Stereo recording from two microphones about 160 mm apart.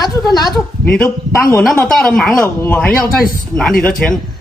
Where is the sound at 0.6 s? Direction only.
5° left (ahead or behind).